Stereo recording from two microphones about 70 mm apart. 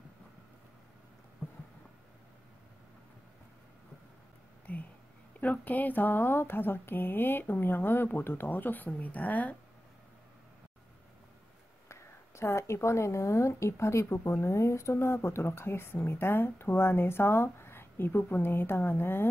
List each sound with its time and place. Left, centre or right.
4.7 s whispering: left
5.4 s speech: left
11.9 s speech: left